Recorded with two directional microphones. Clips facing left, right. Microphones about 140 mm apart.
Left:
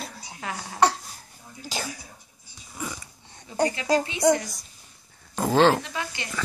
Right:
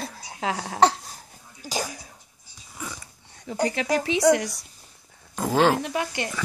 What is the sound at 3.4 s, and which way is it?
Speech, 75° right (ahead or behind).